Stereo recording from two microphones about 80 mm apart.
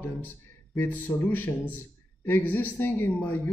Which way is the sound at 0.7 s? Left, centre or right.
Left.